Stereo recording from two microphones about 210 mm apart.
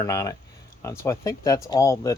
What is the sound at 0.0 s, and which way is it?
Speech, 15° left (ahead or behind).